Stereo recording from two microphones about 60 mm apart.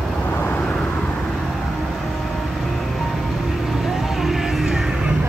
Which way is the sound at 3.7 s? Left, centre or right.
Centre.